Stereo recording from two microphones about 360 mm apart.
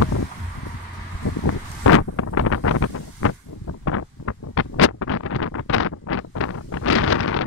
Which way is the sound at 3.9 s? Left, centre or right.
Left.